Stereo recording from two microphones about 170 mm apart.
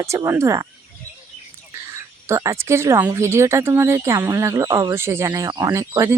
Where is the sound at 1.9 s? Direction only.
15° right (ahead or behind).